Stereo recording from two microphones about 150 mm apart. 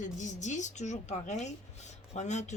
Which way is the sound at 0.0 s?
55° left (ahead or behind).